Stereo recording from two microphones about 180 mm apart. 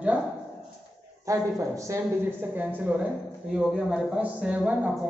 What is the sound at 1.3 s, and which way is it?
A woman's voice, 15° right (ahead or behind).